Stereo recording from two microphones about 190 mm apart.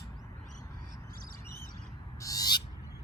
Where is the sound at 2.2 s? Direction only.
20° left (ahead or behind).